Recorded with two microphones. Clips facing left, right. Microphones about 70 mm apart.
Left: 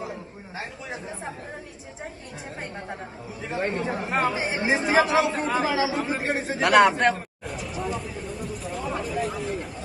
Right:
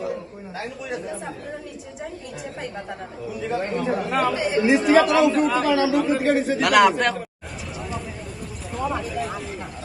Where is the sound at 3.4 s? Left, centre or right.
Left.